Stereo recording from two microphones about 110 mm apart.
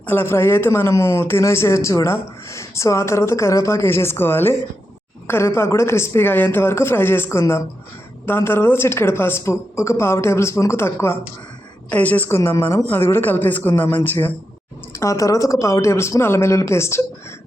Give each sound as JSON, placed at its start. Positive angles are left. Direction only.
{"t": 0.0, "sound": "speech", "side_deg": 20}
{"t": 14.9, "sound": "speech", "side_deg": 30}